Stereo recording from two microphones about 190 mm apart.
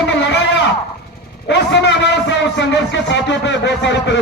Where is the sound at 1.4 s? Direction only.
60° left (ahead or behind).